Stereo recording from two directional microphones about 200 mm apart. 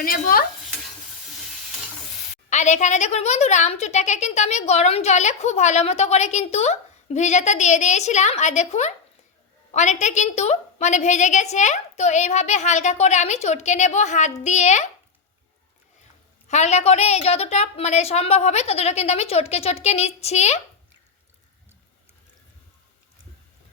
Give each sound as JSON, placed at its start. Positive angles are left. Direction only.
{"t": 0.0, "sound": "stir", "side_deg": 45}
{"t": 2.5, "sound": "a woman's voice", "side_deg": 35}
{"t": 16.5, "sound": "a woman's voice", "side_deg": 35}